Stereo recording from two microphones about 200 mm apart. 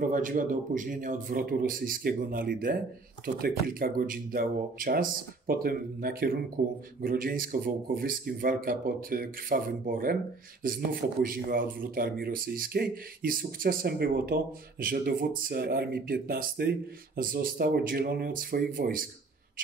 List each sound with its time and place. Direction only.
0.0 s speech: 40° right (ahead or behind)